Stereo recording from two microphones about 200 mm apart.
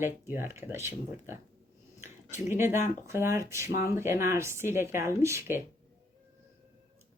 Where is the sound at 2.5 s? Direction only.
10° right (ahead or behind).